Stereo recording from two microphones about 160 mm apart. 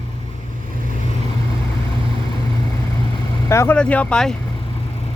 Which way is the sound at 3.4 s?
15° left (ahead or behind).